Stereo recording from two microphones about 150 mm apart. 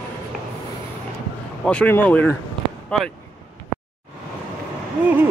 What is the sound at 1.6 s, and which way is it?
Speech, 10° left (ahead or behind).